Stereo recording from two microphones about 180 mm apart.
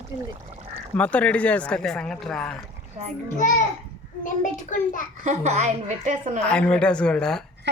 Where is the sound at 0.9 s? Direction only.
5° left (ahead or behind).